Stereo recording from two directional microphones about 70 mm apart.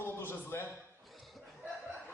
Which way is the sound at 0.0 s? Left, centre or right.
Left.